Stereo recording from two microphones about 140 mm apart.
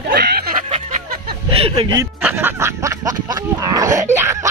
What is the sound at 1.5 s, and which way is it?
Speech, 40° right (ahead or behind).